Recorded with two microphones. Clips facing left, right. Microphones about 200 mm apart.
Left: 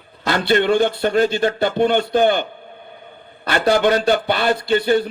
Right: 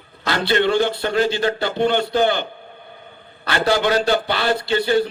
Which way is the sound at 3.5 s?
50° left (ahead or behind).